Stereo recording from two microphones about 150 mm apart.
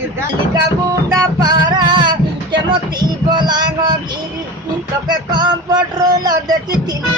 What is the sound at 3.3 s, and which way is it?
Speech, 30° right (ahead or behind).